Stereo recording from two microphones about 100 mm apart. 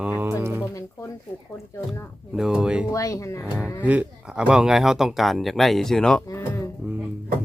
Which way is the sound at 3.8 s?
15° right (ahead or behind).